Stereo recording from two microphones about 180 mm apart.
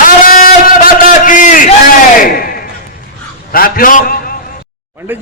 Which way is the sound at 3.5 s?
50° left (ahead or behind).